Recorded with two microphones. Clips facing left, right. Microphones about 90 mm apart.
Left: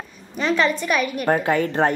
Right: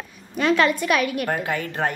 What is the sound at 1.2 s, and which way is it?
Speech, 35° left (ahead or behind).